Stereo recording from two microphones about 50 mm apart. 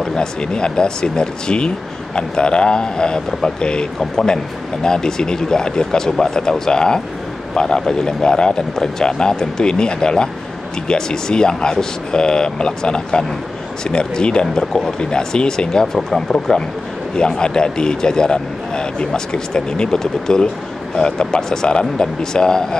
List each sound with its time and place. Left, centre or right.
0.0 s a man's voice: centre
4.8 s a man's voice: centre